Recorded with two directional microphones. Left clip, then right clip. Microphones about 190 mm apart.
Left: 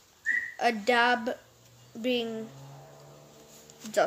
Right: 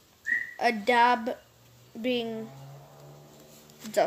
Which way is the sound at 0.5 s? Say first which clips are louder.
Right 2 dB; 15° left (ahead or behind).